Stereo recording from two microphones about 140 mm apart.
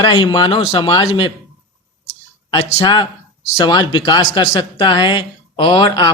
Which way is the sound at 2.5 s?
30° left (ahead or behind).